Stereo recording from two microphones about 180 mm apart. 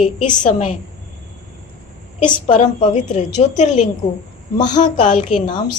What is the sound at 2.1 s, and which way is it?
A woman's voice, 40° left (ahead or behind).